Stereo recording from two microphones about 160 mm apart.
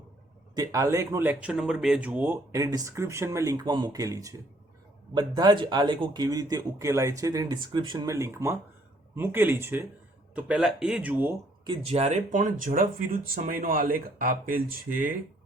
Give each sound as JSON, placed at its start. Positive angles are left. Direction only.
{"t": 0.5, "sound": "speech", "side_deg": -20}
{"t": 8.1, "sound": "speech", "side_deg": -15}
{"t": 11.6, "sound": "speech", "side_deg": -35}